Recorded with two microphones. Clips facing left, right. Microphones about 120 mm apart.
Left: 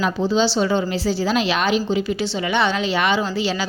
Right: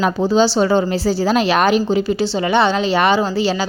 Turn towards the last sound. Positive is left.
turn(degrees=-35)  # may be behind; listen again after turning